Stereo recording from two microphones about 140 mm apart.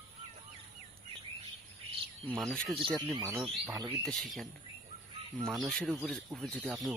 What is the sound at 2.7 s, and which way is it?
Speech, 35° right (ahead or behind).